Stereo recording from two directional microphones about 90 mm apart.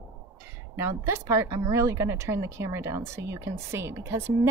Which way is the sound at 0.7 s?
30° right (ahead or behind).